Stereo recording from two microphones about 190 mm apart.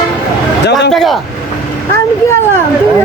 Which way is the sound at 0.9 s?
Centre (ahead or behind).